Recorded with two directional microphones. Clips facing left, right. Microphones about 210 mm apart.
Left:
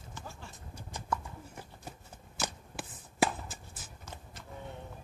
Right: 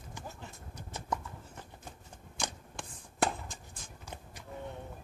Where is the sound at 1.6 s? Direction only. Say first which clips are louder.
Left 2 dB; 5° left (ahead or behind).